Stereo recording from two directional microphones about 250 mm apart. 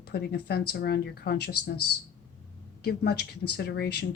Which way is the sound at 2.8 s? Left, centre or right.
Left.